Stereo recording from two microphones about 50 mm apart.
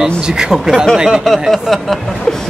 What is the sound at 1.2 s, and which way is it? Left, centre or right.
Speech, centre.